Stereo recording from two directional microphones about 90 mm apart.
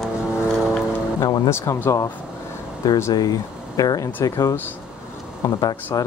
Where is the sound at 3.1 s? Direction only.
45° left (ahead or behind).